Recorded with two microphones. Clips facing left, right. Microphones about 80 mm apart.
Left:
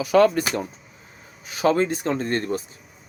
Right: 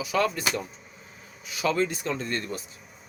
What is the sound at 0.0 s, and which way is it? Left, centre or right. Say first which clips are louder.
Speech: left 9 dB; left.